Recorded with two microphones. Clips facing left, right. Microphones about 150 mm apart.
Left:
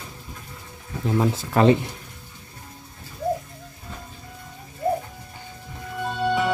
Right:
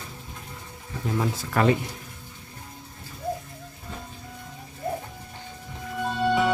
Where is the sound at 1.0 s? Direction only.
25° left (ahead or behind).